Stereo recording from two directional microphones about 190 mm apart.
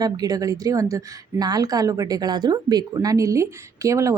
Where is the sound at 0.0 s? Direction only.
20° right (ahead or behind).